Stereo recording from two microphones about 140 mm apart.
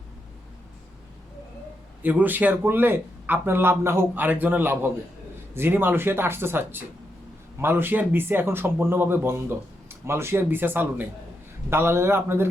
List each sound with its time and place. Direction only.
2.0 s a man's voice: 10° right (ahead or behind)